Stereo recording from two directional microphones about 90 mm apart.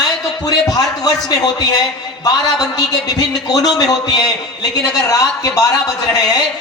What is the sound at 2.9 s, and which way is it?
A man's voice, 45° left (ahead or behind).